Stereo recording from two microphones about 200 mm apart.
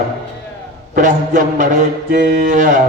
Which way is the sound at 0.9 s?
40° right (ahead or behind).